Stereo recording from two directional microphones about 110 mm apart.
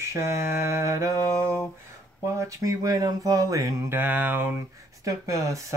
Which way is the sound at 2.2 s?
30° right (ahead or behind).